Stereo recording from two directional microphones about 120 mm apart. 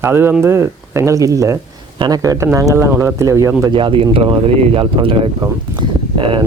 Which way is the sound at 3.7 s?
45° right (ahead or behind).